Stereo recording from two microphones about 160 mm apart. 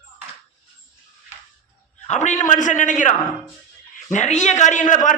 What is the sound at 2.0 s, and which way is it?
A man's voice, 50° left (ahead or behind).